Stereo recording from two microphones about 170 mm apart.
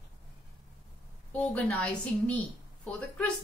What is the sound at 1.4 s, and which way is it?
A woman's voice, 5° left (ahead or behind).